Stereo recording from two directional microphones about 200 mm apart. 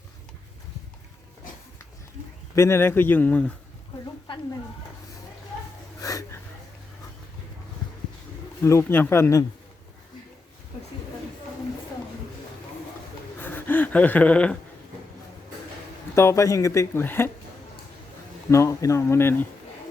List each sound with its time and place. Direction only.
2.6 s speech: 15° left (ahead or behind)
6.0 s wheeze: 15° left (ahead or behind)
8.6 s speech: 10° left (ahead or behind)
13.4 s gasp: 10° left (ahead or behind)
16.1 s speech: 15° left (ahead or behind)
18.5 s speech: 15° left (ahead or behind)